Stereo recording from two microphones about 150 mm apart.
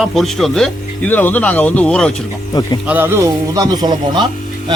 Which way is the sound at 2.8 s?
15° right (ahead or behind).